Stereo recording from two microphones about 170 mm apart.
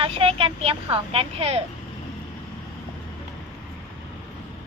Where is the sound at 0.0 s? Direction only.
35° right (ahead or behind).